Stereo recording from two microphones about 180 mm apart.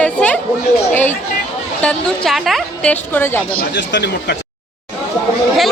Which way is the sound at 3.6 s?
75° left (ahead or behind).